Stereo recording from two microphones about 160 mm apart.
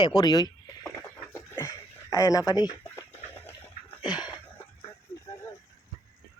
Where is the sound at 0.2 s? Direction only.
25° left (ahead or behind).